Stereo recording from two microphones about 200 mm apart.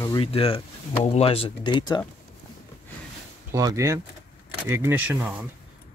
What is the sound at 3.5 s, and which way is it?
Speech, 15° right (ahead or behind).